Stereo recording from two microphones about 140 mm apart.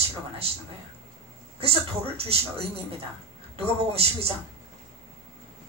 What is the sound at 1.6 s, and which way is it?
Speech, 45° right (ahead or behind).